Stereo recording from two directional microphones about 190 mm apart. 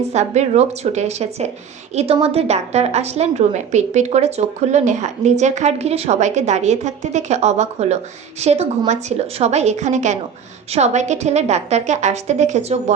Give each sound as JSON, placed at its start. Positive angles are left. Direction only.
{"t": 0.1, "sound": "a woman's voice", "side_deg": -35}